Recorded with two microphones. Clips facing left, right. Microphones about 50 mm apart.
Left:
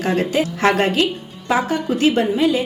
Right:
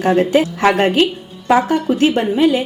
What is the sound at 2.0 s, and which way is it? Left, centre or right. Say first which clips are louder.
Speech: right 1 dB; right.